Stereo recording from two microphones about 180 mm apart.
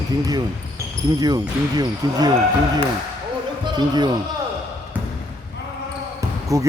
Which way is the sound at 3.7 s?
25° right (ahead or behind).